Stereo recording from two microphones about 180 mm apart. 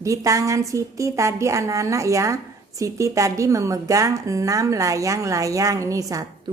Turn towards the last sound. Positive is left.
turn(degrees=-20)  # may be behind; listen again after turning